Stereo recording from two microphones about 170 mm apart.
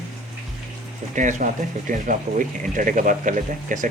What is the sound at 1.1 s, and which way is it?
Speech, 50° right (ahead or behind).